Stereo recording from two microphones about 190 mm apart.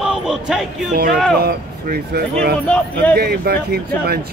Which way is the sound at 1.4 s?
55° right (ahead or behind).